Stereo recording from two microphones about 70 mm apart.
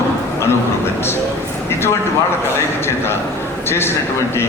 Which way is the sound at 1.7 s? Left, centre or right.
Left.